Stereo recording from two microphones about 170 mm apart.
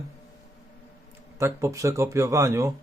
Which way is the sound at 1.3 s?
15° right (ahead or behind).